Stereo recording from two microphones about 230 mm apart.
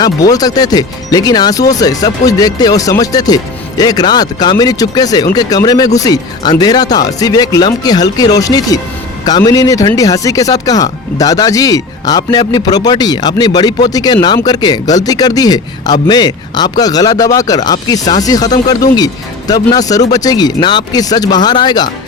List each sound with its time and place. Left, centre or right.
0.0 s speech: centre